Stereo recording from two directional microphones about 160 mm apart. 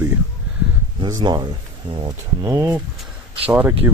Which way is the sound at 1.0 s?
25° right (ahead or behind).